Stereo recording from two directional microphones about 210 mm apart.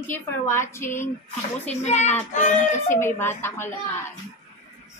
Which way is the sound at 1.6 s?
35° left (ahead or behind).